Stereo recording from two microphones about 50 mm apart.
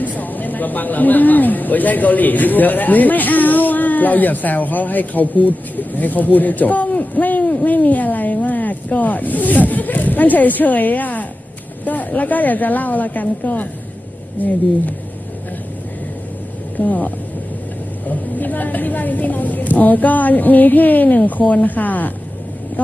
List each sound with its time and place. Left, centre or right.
0.0 s a woman's voice: left
16.7 s speech: left
18.3 s a woman's voice: left